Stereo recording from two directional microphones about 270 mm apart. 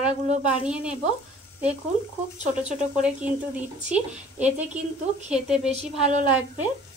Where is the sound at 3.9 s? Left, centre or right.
Centre.